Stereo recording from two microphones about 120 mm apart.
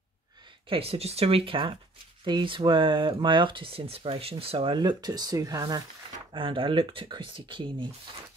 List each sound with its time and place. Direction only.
0.7 s speech: 55° right (ahead or behind); by 5.8 s 30° right (ahead or behind)
6.3 s speech: 45° right (ahead or behind)